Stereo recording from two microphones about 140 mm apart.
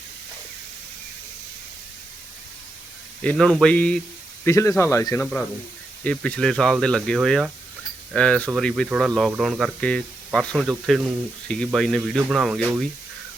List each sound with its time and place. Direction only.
3.2 s speech: 5° left (ahead or behind)
4.4 s speech: 20° left (ahead or behind)
5.2 s speech: 10° left (ahead or behind)